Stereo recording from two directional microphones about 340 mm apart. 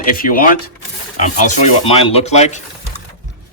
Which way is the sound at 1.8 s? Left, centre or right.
Centre.